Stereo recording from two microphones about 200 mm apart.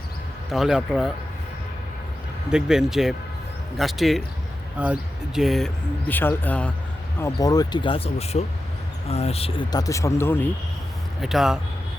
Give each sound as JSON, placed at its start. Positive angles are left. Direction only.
{"t": 0.5, "sound": "speech", "side_deg": 0}
{"t": 2.5, "sound": "speech", "side_deg": -5}
{"t": 11.2, "sound": "speech", "side_deg": 0}